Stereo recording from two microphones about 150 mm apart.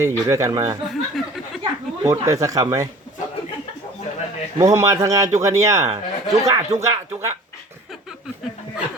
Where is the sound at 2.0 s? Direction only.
20° right (ahead or behind).